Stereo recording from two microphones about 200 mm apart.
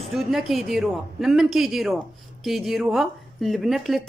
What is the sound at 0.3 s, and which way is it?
Speech, centre (ahead or behind).